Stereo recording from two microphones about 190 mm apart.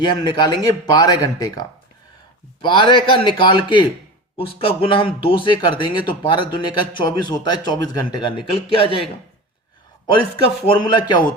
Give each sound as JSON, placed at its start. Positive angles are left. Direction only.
{"t": 0.0, "sound": "a man's voice", "side_deg": 25}
{"t": 10.7, "sound": "a man's voice", "side_deg": 25}